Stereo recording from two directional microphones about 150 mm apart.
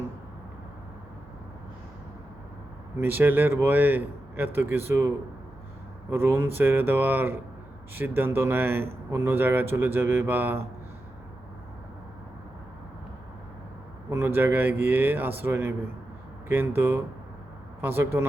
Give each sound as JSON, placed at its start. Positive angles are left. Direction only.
{"t": 3.0, "sound": "speech", "side_deg": -15}
{"t": 14.1, "sound": "speech", "side_deg": -15}